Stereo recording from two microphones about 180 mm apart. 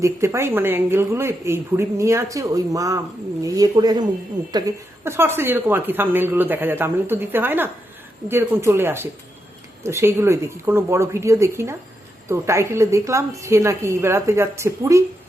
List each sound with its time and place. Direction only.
0.0 s a woman's voice: 15° right (ahead or behind)